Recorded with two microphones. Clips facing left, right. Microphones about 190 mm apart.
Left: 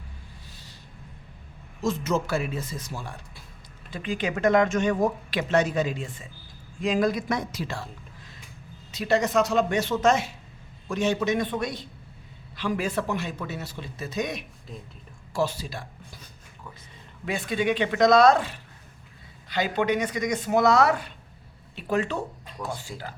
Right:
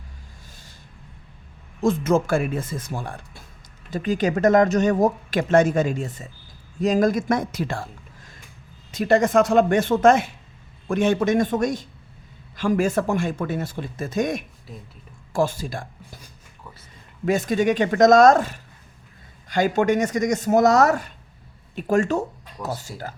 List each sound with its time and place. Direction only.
1.8 s speech: 50° right (ahead or behind)
3.8 s speech: 40° right (ahead or behind)
8.9 s speech: 50° right (ahead or behind)
14.7 s speech: centre (ahead or behind)
15.3 s speech: 50° right (ahead or behind)
17.2 s speech: 45° right (ahead or behind)